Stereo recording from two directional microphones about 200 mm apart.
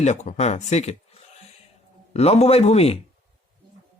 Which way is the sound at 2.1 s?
30° left (ahead or behind).